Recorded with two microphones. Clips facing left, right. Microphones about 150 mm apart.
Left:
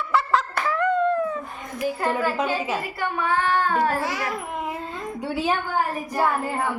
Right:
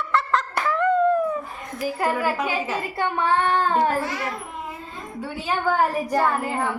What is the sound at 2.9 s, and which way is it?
Speech, 25° right (ahead or behind).